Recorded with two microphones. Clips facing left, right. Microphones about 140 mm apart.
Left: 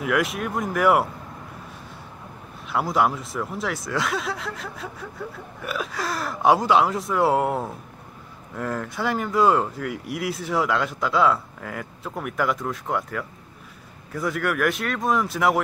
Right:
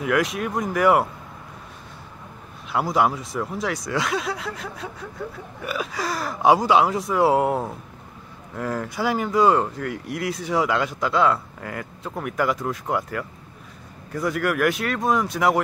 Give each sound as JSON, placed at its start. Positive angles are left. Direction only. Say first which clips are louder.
{"t": 0.0, "sound": "speech", "louder": "right 1 dB", "side_deg": 0}
{"t": 2.7, "sound": "speech", "louder": "right 1 dB", "side_deg": 0}